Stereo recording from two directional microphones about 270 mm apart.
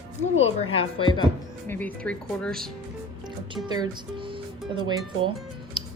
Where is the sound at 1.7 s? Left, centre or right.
Centre.